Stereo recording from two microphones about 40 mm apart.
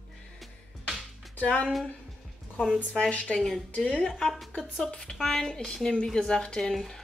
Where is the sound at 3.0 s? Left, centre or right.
Left.